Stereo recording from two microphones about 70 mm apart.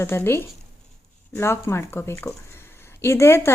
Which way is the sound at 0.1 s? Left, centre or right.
Left.